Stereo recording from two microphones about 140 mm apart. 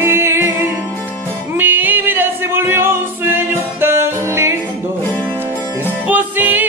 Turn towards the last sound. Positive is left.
turn(degrees=-15)  # may be behind; listen again after turning